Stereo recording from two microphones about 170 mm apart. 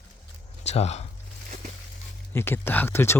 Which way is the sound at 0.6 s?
40° left (ahead or behind).